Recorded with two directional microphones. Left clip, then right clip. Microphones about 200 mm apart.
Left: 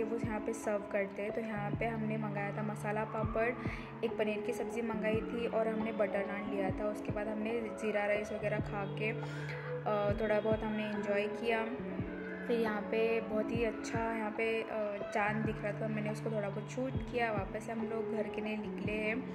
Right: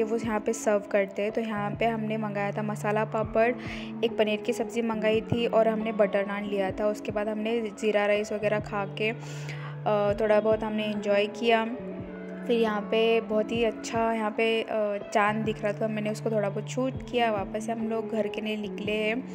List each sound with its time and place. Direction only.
0.0 s music: 40° right (ahead or behind)
9.8 s speech: 40° right (ahead or behind)
12.4 s music: 40° right (ahead or behind)